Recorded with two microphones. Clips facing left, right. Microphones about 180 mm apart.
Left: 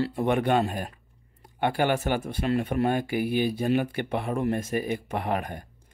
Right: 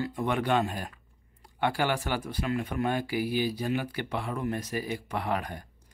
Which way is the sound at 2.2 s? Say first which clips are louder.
Left 4 dB; 30° left (ahead or behind).